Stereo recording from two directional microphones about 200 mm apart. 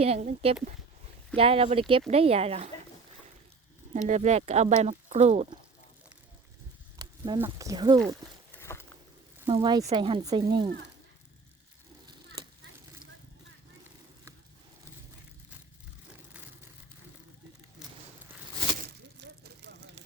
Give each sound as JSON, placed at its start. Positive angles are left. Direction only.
{"t": 0.0, "sound": "speech", "side_deg": -30}
{"t": 3.9, "sound": "speech", "side_deg": -35}
{"t": 7.3, "sound": "speech", "side_deg": -15}
{"t": 8.5, "sound": "walk", "side_deg": 10}
{"t": 9.5, "sound": "speech", "side_deg": -25}
{"t": 18.8, "sound": "a sound", "side_deg": -55}